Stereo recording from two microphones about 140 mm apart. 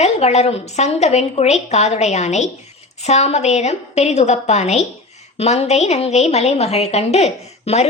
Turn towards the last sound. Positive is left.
turn(degrees=50)  # may be behind; listen again after turning